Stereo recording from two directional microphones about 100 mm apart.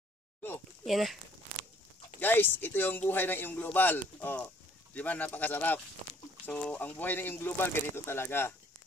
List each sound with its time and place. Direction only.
0.8 s speech: centre (ahead or behind)
2.1 s speech: 20° left (ahead or behind)